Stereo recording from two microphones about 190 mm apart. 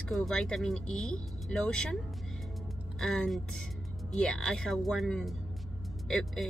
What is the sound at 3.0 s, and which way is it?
Speech, centre (ahead or behind).